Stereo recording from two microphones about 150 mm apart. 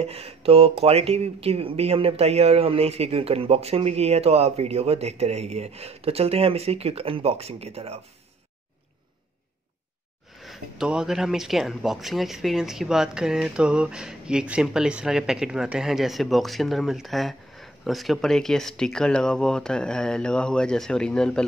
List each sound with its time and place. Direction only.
0.0 s speech: 40° right (ahead or behind)
10.4 s speech: centre (ahead or behind)